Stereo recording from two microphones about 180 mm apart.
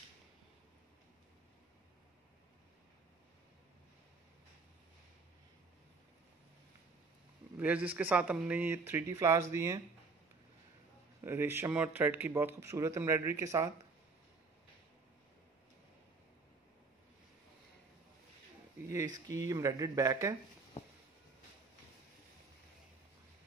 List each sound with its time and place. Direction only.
7.5 s a man's voice: 10° right (ahead or behind)
11.1 s a man's voice: 15° right (ahead or behind)
18.9 s speech: 20° right (ahead or behind)